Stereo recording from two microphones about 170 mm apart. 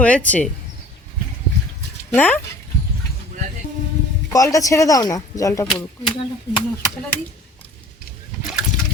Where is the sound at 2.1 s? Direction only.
10° left (ahead or behind).